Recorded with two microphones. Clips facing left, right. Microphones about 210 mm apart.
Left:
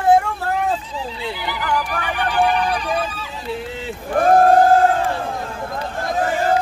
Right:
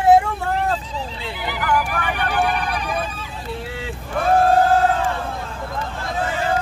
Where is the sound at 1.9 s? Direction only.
50° right (ahead or behind).